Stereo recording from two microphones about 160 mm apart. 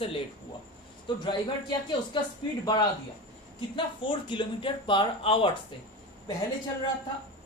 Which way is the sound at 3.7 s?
30° left (ahead or behind).